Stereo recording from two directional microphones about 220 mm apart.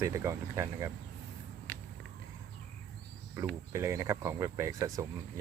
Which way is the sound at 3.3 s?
10° right (ahead or behind).